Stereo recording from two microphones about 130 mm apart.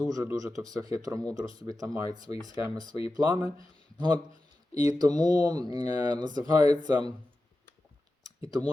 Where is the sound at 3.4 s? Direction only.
40° left (ahead or behind).